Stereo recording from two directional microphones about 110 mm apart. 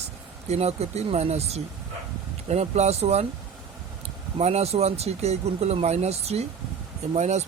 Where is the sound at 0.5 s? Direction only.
75° right (ahead or behind).